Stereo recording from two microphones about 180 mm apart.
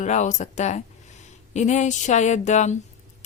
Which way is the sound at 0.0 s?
40° left (ahead or behind).